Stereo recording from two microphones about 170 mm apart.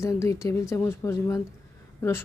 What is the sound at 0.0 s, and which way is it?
A woman's voice, 15° left (ahead or behind).